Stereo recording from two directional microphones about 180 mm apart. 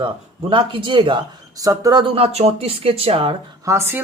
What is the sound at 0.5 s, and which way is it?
Speech, 25° right (ahead or behind).